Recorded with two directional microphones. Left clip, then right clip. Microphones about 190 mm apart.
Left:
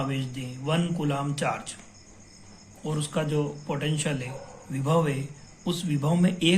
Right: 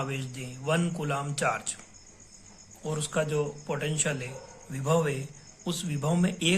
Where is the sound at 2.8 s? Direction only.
50° right (ahead or behind).